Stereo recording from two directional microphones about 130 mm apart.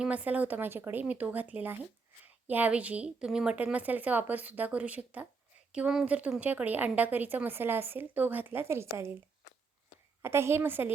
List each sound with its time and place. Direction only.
0.0 s a woman's voice: 10° right (ahead or behind)
10.2 s a woman's voice: 20° right (ahead or behind)